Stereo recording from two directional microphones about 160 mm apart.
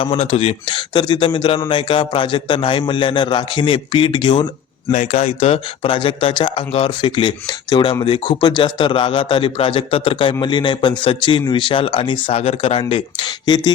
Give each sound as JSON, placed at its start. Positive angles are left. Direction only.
{"t": 0.0, "sound": "speech", "side_deg": 35}
{"t": 4.9, "sound": "speech", "side_deg": 45}